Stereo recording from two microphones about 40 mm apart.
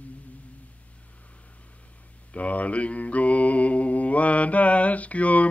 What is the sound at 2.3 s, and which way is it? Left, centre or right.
Mantra, left.